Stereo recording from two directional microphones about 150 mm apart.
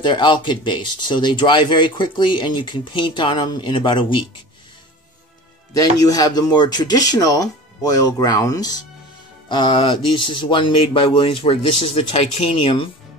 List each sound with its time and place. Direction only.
0.0 s speech: 30° left (ahead or behind)
5.7 s speech: 25° left (ahead or behind)